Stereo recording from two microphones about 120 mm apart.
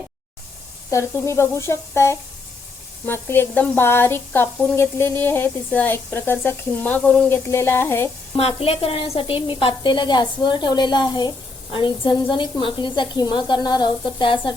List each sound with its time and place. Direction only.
0.9 s a woman's voice: 25° left (ahead or behind); by 7.3 s 10° left (ahead or behind)
7.3 s speech: 20° left (ahead or behind)
8.4 s a woman's voice: 55° left (ahead or behind)